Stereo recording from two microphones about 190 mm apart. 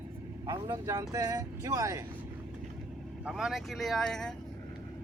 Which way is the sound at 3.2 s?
5° right (ahead or behind).